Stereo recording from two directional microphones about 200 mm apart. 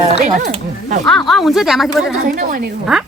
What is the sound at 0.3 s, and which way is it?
Speech, 40° right (ahead or behind).